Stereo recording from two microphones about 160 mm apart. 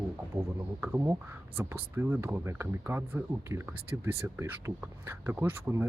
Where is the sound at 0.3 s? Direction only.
20° right (ahead or behind).